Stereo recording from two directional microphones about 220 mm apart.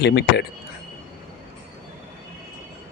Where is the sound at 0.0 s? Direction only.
50° left (ahead or behind).